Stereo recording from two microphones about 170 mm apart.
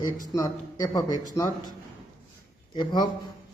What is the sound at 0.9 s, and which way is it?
Speech, 20° left (ahead or behind).